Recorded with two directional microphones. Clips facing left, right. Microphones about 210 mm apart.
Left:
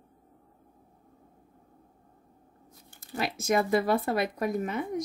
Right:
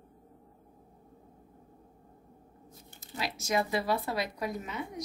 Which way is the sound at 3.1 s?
55° left (ahead or behind).